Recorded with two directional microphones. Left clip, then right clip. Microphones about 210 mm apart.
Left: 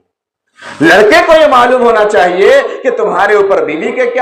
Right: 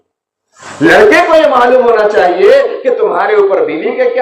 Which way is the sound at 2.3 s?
55° left (ahead or behind).